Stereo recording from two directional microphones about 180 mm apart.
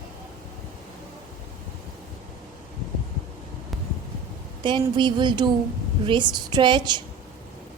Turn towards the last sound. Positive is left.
turn(degrees=-25)  # may be behind; listen again after turning